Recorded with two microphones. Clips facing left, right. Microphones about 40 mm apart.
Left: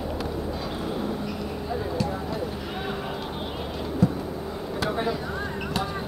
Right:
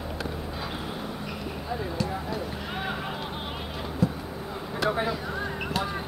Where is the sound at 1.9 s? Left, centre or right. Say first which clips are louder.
Left 2 dB; centre.